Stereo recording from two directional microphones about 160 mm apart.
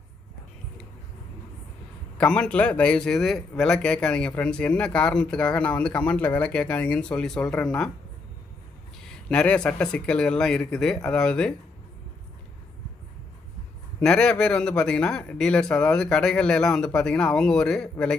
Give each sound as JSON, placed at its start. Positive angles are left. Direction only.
{"t": 2.1, "sound": "a man's voice", "side_deg": 5}
{"t": 9.3, "sound": "a man's voice", "side_deg": 5}
{"t": 14.0, "sound": "speech", "side_deg": 5}